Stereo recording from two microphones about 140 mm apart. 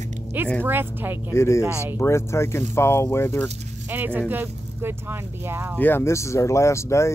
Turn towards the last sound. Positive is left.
turn(degrees=20)  # may be behind; listen again after turning